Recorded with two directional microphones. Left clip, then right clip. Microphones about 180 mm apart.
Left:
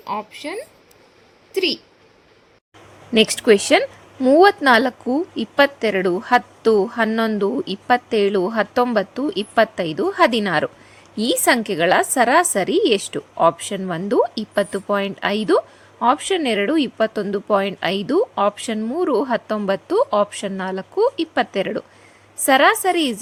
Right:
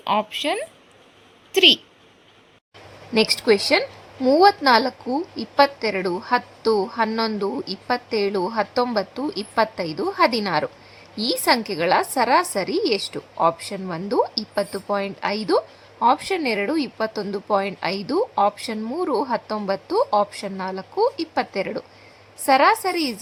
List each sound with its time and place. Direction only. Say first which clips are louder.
0.0 s speech: right 5 dB; 15° right (ahead or behind)
3.4 s a woman's voice: left 4 dB; 20° left (ahead or behind)